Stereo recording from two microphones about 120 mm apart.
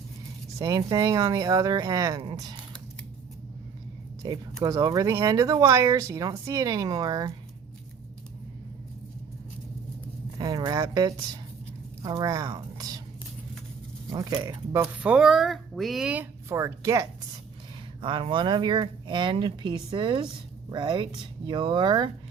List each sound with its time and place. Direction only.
0.6 s speech: 30° right (ahead or behind)
4.2 s speech: 30° right (ahead or behind)
10.3 s speech: 30° right (ahead or behind)
14.1 s speech: 30° right (ahead or behind)
15.0 s speech: 10° right (ahead or behind); by 17.1 s 25° right (ahead or behind)
18.0 s speech: 45° right (ahead or behind)